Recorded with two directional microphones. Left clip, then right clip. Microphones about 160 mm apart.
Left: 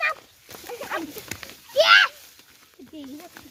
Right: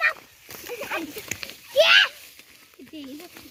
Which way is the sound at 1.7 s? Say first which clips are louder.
Left 1 dB; 5° right (ahead or behind).